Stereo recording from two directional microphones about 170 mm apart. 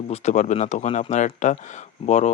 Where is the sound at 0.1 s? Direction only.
45° left (ahead or behind).